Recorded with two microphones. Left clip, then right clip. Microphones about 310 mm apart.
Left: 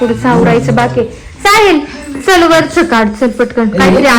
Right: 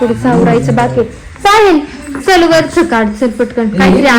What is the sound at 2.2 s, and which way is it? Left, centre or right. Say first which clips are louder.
Speech: left 1 dB; left.